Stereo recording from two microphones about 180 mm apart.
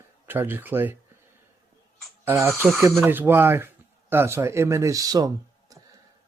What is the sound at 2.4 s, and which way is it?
Speech, 15° right (ahead or behind).